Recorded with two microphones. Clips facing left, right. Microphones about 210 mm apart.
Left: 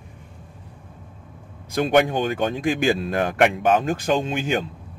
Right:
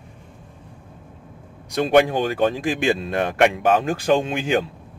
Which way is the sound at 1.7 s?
Centre (ahead or behind).